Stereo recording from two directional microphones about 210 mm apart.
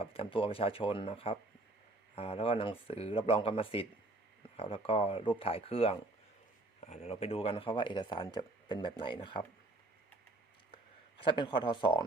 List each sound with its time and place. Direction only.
0.0 s speech: 25° left (ahead or behind)
11.2 s speech: 25° left (ahead or behind)